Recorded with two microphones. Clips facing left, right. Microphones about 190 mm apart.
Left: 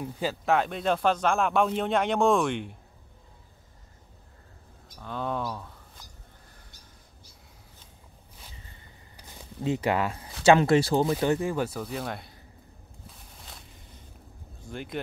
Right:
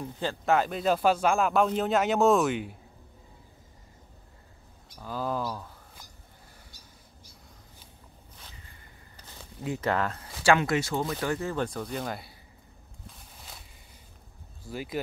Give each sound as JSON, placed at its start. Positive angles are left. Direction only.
{"t": 0.0, "sound": "speech", "side_deg": 5}
{"t": 5.0, "sound": "speech", "side_deg": 0}
{"t": 9.1, "sound": "a sound", "side_deg": 15}
{"t": 9.6, "sound": "speech", "side_deg": 20}
{"t": 10.6, "sound": "speech", "side_deg": 35}
{"t": 14.7, "sound": "speech", "side_deg": -5}